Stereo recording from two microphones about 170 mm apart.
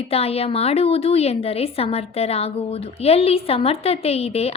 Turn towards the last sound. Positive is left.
turn(degrees=35)  # may be behind; listen again after turning